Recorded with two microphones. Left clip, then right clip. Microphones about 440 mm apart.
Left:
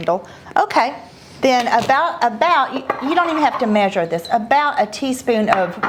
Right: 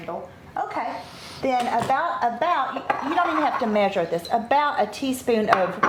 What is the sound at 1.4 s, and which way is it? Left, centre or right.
A woman's voice, left.